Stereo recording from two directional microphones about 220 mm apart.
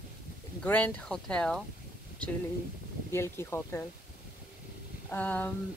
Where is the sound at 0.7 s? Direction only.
5° left (ahead or behind).